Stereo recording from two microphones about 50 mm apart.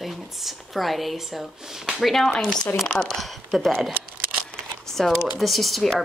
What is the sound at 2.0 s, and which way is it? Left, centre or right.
Speech, centre.